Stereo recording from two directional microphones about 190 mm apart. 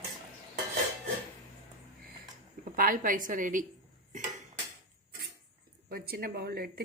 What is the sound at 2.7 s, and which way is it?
Speech, 45° right (ahead or behind).